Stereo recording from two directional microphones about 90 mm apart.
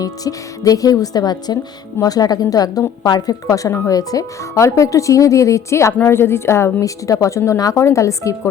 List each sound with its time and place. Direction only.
0.0 s speech: 45° left (ahead or behind)